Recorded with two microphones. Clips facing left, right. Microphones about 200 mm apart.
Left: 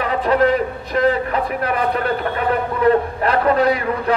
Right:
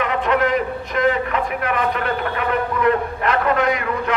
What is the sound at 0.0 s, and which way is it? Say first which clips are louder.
A man's voice: left 3 dB; 35° left (ahead or behind).